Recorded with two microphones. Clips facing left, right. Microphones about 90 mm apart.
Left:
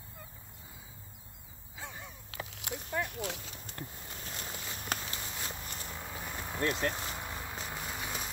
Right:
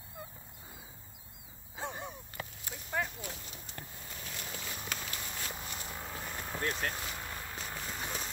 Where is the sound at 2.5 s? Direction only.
80° left.